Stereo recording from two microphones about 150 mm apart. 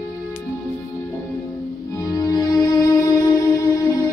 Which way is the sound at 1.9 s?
20° left (ahead or behind).